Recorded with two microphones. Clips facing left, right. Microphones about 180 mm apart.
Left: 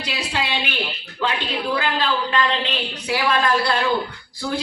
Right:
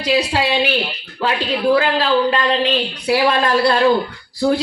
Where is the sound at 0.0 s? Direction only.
35° right (ahead or behind).